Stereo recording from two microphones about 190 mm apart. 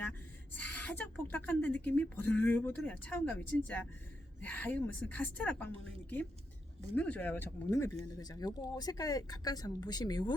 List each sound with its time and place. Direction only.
0.5 s speech: 10° left (ahead or behind)